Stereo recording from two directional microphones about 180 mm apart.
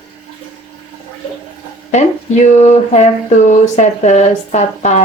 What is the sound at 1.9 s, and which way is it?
Speech, 40° left (ahead or behind).